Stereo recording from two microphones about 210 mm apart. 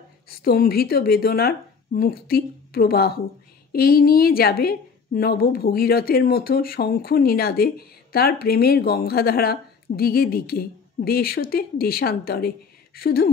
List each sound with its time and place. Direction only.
0.3 s a woman's voice: 45° left (ahead or behind)